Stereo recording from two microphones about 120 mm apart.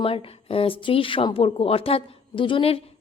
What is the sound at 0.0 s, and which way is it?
Speech, 50° left (ahead or behind).